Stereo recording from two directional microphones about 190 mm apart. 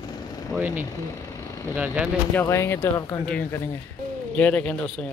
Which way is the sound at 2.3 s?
15° left (ahead or behind).